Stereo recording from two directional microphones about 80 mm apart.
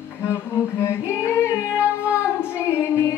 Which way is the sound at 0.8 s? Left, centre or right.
Left.